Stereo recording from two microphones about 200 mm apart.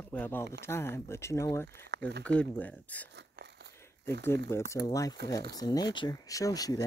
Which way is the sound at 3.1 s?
60° right (ahead or behind).